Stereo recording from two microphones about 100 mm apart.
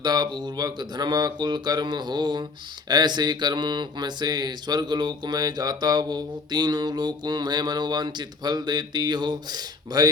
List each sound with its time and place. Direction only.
0.0 s mantra: 45° right (ahead or behind)